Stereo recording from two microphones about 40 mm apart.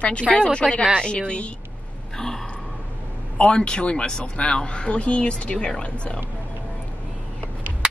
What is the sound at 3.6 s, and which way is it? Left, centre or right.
Speech, left.